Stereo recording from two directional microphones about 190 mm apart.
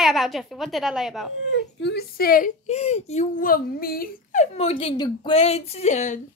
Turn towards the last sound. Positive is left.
turn(degrees=40)  # may be behind; listen again after turning